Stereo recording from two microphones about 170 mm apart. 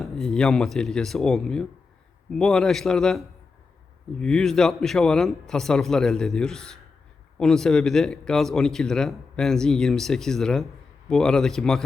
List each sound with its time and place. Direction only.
0.0 s a man's voice: 5° left (ahead or behind)